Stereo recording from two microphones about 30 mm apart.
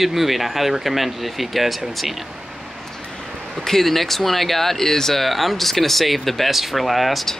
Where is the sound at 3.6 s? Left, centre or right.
Centre.